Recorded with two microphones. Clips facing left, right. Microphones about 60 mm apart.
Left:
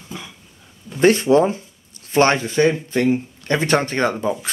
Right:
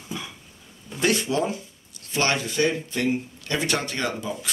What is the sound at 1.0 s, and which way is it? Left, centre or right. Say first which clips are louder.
Speech: left 9 dB; left.